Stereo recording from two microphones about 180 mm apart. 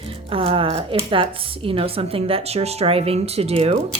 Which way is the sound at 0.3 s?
30° right (ahead or behind).